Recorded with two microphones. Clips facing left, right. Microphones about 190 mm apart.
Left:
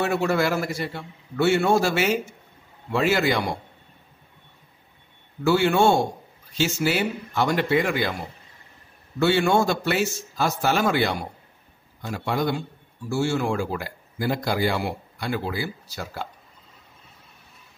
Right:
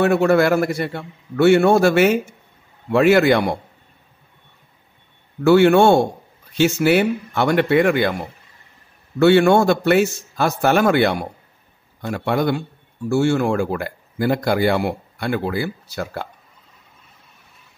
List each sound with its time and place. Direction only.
0.0 s speech: 55° right (ahead or behind)
5.4 s speech: 60° right (ahead or behind)
9.2 s speech: 60° right (ahead or behind)